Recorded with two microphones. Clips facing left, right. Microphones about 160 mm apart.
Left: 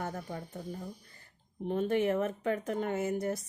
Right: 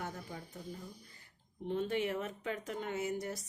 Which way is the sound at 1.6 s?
50° left (ahead or behind).